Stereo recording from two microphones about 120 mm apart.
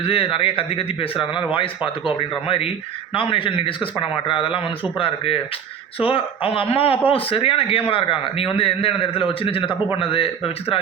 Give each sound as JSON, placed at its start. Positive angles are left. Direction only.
{"t": 0.0, "sound": "speech", "side_deg": 50}